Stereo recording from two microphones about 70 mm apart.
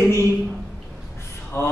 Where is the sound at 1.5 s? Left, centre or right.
Left.